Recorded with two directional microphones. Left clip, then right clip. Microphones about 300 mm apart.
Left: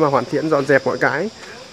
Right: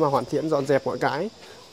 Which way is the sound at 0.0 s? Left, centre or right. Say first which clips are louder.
Left 5 dB; centre.